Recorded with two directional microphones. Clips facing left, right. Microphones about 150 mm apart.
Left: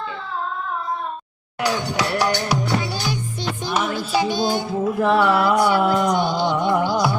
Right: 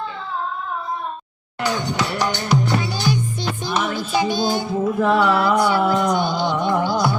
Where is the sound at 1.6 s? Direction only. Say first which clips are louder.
Even; 10° left (ahead or behind).